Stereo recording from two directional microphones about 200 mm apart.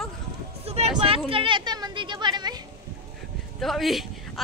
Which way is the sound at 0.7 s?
30° right (ahead or behind).